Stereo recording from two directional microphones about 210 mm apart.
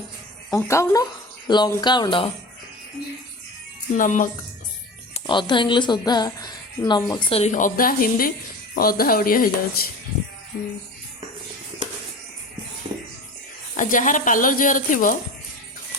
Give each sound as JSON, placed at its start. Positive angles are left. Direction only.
{"t": 0.5, "sound": "a woman's voice", "side_deg": 15}
{"t": 3.9, "sound": "speech", "side_deg": 40}
{"t": 5.1, "sound": "speech", "side_deg": 20}
{"t": 13.7, "sound": "speech", "side_deg": 40}